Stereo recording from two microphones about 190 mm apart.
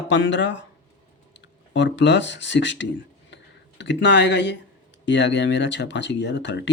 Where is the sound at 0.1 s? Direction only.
70° left (ahead or behind).